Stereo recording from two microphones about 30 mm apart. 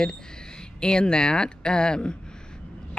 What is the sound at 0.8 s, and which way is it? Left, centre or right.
Speech, left.